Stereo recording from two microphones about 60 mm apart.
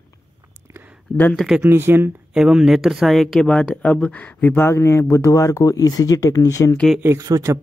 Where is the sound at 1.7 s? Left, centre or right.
Right.